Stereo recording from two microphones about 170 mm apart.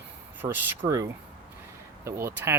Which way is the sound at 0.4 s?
10° right (ahead or behind).